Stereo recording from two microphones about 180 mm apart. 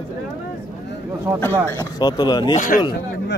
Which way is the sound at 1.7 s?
20° left (ahead or behind).